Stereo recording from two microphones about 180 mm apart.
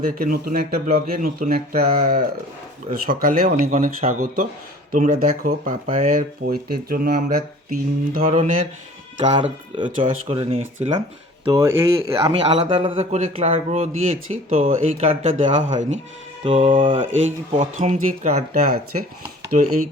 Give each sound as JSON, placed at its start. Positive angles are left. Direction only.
{"t": 0.2, "sound": "speech", "side_deg": -55}
{"t": 6.4, "sound": "speech", "side_deg": -55}
{"t": 8.2, "sound": "speech", "side_deg": -40}
{"t": 9.4, "sound": "speech", "side_deg": -30}
{"t": 11.8, "sound": "speech", "side_deg": -15}
{"t": 12.1, "sound": "speech", "side_deg": -35}
{"t": 16.4, "sound": "speech", "side_deg": -30}
{"t": 17.6, "sound": "speech", "side_deg": -45}
{"t": 19.5, "sound": "speech", "side_deg": -35}